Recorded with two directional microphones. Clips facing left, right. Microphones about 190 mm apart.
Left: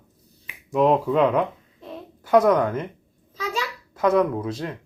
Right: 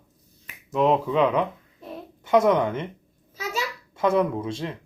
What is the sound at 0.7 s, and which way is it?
Speech, 5° left (ahead or behind).